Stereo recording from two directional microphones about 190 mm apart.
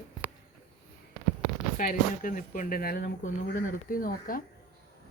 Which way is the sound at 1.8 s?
45° left (ahead or behind).